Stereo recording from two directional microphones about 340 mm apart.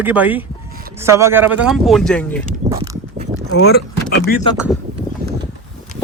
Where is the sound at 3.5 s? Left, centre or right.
Left.